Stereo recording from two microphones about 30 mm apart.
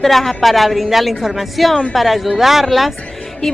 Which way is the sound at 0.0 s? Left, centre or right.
Centre.